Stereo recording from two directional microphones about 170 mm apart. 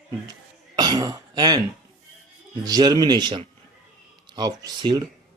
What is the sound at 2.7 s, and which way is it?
Speech, 25° right (ahead or behind).